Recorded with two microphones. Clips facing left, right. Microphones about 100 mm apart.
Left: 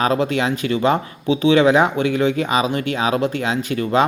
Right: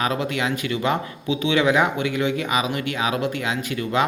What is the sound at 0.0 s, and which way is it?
Speech, 35° left (ahead or behind).